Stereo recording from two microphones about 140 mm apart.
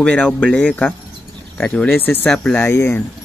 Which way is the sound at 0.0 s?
10° left (ahead or behind).